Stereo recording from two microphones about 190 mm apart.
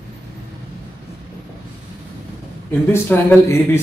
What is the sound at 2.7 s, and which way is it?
Speech, 10° left (ahead or behind).